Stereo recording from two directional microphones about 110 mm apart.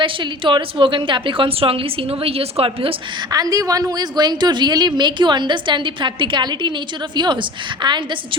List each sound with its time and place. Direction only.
0.0 s a woman's voice: 50° right (ahead or behind)
3.3 s a woman's voice: 35° right (ahead or behind)
7.8 s a woman's voice: 45° right (ahead or behind)